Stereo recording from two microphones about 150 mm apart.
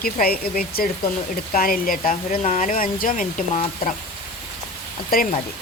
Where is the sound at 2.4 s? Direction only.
50° left (ahead or behind).